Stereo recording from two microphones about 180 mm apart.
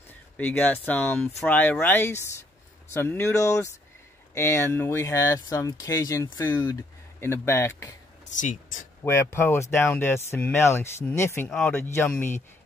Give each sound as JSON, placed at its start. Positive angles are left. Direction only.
{"t": 0.4, "sound": "speech", "side_deg": 10}
{"t": 8.3, "sound": "speech", "side_deg": 45}
{"t": 9.0, "sound": "speech", "side_deg": 15}